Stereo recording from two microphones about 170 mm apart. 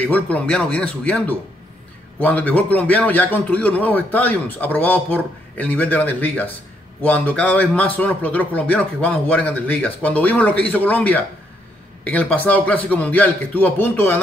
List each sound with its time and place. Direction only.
0.0 s a man's voice: 10° left (ahead or behind)